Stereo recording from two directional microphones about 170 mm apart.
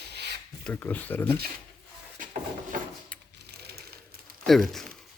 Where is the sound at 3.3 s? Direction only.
70° right (ahead or behind).